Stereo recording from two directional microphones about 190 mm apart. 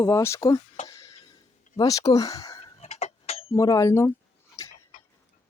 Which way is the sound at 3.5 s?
15° left (ahead or behind).